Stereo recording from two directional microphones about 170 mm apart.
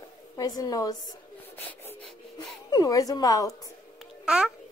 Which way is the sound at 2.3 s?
25° left (ahead or behind).